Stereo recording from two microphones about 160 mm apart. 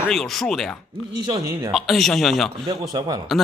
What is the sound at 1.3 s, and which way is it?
Speech, 25° right (ahead or behind).